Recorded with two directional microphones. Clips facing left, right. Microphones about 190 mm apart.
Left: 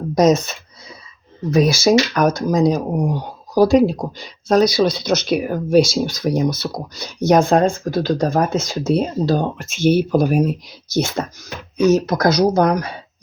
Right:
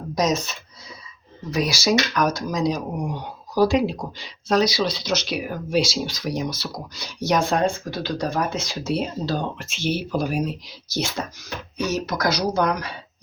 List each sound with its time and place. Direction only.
0.2 s speech: 55° left (ahead or behind)